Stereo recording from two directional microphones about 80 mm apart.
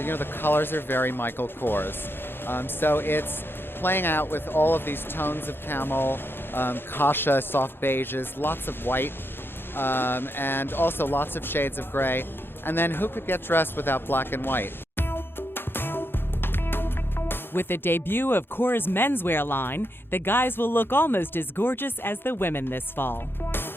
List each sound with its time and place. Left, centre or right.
0.0 s speech: left